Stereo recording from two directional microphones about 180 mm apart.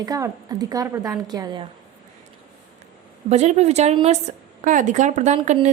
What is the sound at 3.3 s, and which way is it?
A woman's voice, 40° right (ahead or behind).